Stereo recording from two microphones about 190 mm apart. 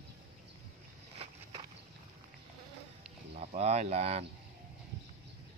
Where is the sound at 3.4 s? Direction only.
35° right (ahead or behind).